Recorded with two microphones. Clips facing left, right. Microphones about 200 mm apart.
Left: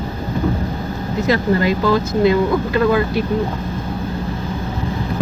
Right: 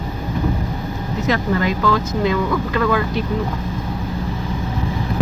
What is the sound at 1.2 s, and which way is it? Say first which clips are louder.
Speech: left 3 dB; 30° left (ahead or behind).